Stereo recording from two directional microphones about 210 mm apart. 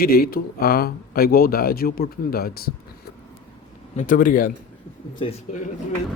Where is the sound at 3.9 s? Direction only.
35° left (ahead or behind).